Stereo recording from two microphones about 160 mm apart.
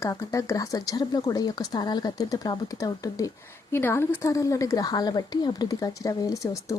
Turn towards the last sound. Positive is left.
turn(degrees=20)  # may be behind; listen again after turning